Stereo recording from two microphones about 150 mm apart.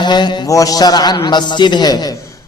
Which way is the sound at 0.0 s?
30° left (ahead or behind).